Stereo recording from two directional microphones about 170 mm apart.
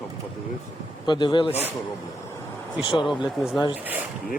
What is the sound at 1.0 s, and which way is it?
Speech, 25° left (ahead or behind).